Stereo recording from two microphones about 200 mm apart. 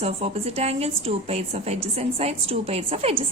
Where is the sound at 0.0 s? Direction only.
30° right (ahead or behind).